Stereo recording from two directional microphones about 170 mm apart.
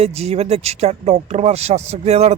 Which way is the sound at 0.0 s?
40° right (ahead or behind).